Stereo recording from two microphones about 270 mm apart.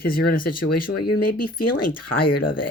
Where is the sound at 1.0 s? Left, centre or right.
Left.